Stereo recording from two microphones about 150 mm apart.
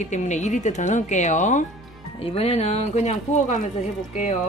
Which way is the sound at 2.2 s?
40° left (ahead or behind).